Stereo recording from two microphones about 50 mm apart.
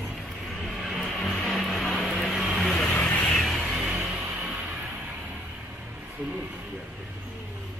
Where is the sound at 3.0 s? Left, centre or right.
Left.